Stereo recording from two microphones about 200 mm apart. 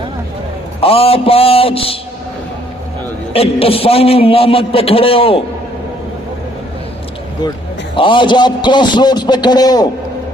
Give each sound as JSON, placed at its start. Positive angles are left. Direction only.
{"t": 0.8, "sound": "a man's voice", "side_deg": 30}
{"t": 3.3, "sound": "a man's voice", "side_deg": 30}
{"t": 7.9, "sound": "a man's voice", "side_deg": 25}